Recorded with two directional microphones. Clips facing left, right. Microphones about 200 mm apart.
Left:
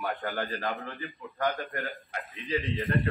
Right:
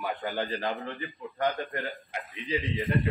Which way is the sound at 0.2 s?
15° right (ahead or behind).